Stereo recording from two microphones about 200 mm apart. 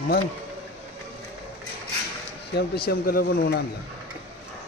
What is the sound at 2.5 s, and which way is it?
Speech, 50° left (ahead or behind).